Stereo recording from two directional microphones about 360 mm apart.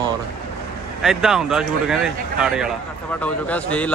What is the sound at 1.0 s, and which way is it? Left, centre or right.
Speech, centre.